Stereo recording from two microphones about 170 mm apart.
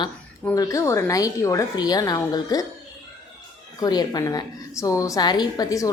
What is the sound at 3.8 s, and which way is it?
A woman's voice, 25° left (ahead or behind).